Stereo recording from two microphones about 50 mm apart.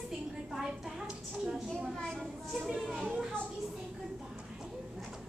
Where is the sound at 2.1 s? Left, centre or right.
Centre.